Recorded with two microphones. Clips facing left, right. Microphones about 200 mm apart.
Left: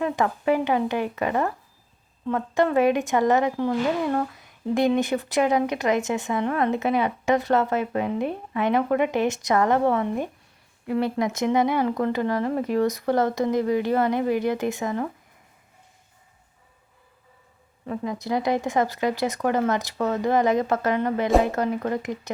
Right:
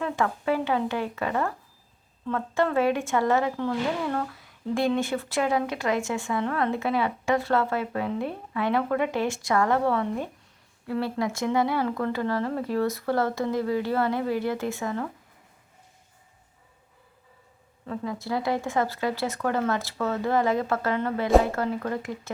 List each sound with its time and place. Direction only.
0.0 s speech: 15° left (ahead or behind)
17.8 s speech: 15° left (ahead or behind)